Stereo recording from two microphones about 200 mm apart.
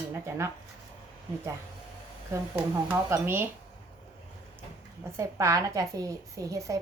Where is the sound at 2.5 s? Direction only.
10° right (ahead or behind).